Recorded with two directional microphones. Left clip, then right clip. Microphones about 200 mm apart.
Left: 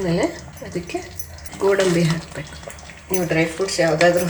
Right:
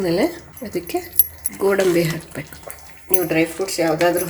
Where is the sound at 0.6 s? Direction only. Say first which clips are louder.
Right 3 dB; 50° right (ahead or behind).